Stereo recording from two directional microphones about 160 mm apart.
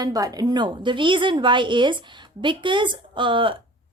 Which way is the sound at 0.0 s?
20° right (ahead or behind).